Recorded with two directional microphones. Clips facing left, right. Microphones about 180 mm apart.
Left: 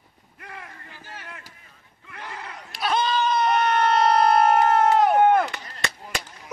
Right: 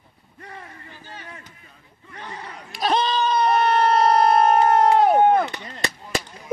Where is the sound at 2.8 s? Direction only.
30° right (ahead or behind).